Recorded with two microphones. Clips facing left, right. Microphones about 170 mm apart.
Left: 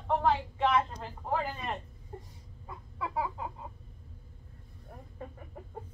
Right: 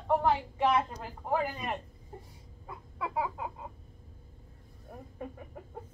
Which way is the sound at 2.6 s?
15° right (ahead or behind).